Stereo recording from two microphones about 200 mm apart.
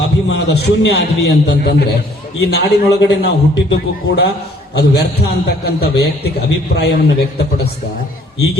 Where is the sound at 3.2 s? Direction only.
60° left (ahead or behind).